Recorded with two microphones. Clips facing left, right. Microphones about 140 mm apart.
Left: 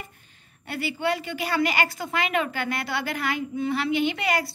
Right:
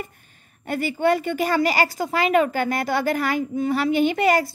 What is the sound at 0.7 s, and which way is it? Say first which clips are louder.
A woman's voice: right 6 dB; 45° right (ahead or behind).